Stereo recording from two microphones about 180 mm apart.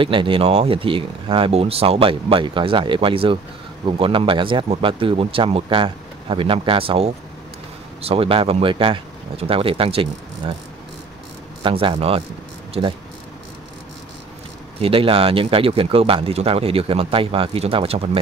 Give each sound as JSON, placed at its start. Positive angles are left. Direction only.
{"t": 0.0, "sound": "speech", "side_deg": -30}
{"t": 11.6, "sound": "speech", "side_deg": -30}
{"t": 14.8, "sound": "speech", "side_deg": -30}